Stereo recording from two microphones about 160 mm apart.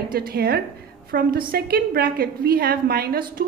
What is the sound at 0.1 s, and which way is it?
A woman's voice, 65° right (ahead or behind).